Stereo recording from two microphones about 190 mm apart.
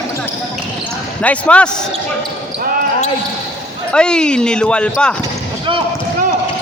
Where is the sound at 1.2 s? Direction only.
5° left (ahead or behind).